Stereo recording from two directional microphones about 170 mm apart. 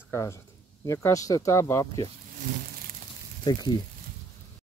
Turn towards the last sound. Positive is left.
turn(degrees=25)  # may be behind; listen again after turning